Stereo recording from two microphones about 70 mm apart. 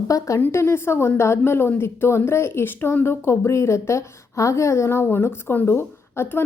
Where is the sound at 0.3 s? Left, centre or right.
Left.